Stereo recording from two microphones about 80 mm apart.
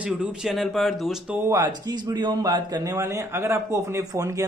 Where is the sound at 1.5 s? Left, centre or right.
Right.